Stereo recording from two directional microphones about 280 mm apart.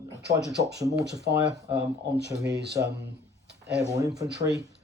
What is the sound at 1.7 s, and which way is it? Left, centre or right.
Speech, right.